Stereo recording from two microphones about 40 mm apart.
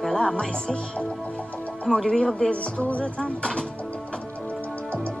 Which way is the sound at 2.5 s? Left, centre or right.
Left.